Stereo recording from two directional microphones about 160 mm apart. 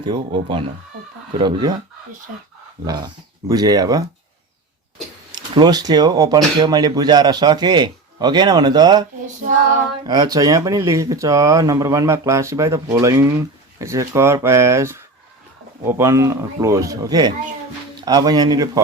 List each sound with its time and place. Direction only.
0.0 s speech: 30° right (ahead or behind)
2.8 s speech: 25° right (ahead or behind)
5.3 s speech: 25° right (ahead or behind)
10.1 s speech: 25° right (ahead or behind)